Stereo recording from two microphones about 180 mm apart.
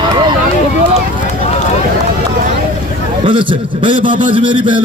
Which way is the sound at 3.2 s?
30° right (ahead or behind).